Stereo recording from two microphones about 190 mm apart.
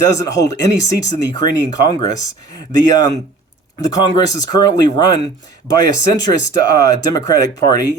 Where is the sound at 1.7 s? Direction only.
20° left (ahead or behind).